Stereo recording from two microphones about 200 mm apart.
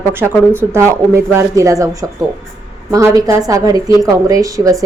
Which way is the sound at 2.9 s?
15° right (ahead or behind).